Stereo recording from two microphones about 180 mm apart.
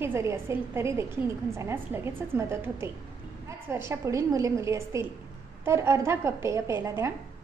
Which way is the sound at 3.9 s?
15° right (ahead or behind).